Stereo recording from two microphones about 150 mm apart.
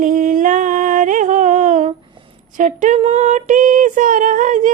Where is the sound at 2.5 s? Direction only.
55° right (ahead or behind).